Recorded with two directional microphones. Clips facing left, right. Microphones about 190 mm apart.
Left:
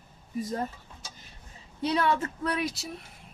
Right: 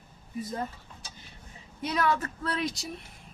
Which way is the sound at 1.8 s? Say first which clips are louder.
Left 2 dB; 30° left (ahead or behind).